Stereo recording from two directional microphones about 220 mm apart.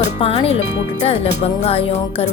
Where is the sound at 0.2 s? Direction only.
25° left (ahead or behind).